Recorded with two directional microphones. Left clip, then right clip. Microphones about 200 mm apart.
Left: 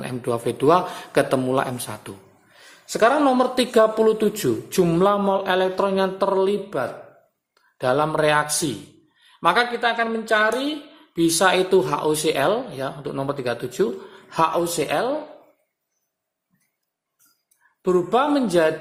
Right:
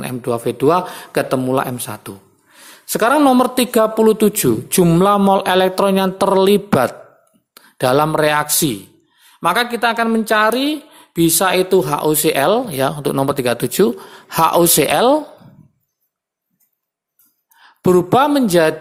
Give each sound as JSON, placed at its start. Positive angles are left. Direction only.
{"t": 0.0, "sound": "a man's voice", "side_deg": -25}
{"t": 2.8, "sound": "a woman's voice", "side_deg": -40}
{"t": 17.8, "sound": "a woman's voice", "side_deg": -35}